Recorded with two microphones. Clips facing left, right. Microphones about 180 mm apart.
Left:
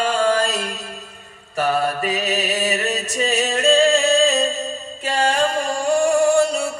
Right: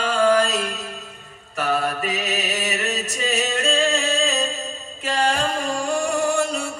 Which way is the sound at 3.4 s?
35° left (ahead or behind).